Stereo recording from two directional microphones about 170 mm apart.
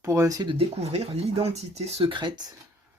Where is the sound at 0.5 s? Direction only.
35° right (ahead or behind).